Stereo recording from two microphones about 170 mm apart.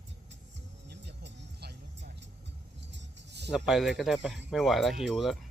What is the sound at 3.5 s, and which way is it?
Speech, centre (ahead or behind).